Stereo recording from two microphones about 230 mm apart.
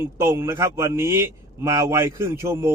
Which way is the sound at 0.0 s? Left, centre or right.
Centre.